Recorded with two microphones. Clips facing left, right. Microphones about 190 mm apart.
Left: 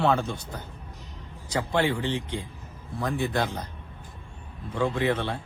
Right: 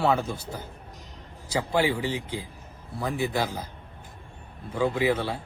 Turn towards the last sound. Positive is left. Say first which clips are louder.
# right 1 dB
turn(degrees=-5)  # may be behind; listen again after turning